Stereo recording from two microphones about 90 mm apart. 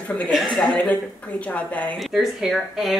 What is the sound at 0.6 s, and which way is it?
A woman's voice, 15° left (ahead or behind).